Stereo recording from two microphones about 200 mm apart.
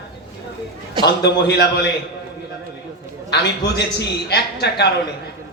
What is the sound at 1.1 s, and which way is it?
Speech, 55° left (ahead or behind).